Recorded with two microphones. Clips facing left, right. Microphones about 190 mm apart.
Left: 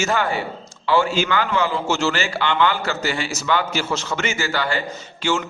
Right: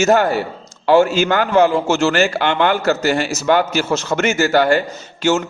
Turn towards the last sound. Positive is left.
turn(degrees=-45)  # may be behind; listen again after turning